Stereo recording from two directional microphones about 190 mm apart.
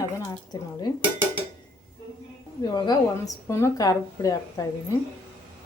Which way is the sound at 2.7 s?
20° left (ahead or behind).